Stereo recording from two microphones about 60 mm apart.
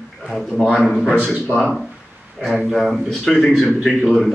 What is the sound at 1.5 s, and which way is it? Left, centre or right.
Speech, left.